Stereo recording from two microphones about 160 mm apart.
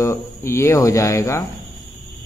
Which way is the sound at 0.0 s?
15° left (ahead or behind).